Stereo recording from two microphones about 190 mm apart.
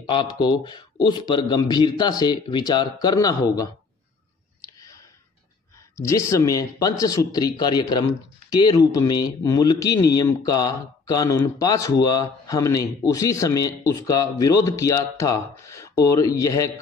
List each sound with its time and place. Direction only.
0.1 s a man's voice: 25° left (ahead or behind)
5.9 s speech: 15° left (ahead or behind)